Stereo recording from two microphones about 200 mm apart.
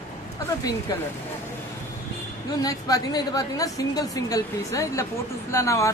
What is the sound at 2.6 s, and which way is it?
A woman's voice, 20° left (ahead or behind).